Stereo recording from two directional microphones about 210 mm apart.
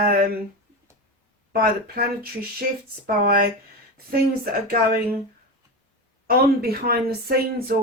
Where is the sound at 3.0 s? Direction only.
45° right (ahead or behind).